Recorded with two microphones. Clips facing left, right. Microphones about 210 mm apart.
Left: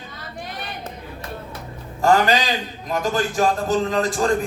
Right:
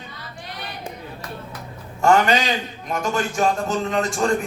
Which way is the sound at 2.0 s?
35° left (ahead or behind).